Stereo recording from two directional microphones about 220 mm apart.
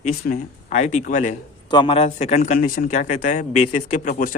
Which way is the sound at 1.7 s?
20° left (ahead or behind).